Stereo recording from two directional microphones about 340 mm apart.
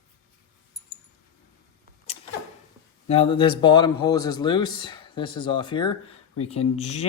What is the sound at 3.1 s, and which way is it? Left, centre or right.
A man's voice, centre.